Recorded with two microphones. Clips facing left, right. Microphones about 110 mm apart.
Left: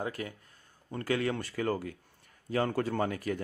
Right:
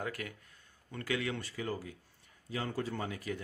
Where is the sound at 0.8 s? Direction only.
40° left (ahead or behind).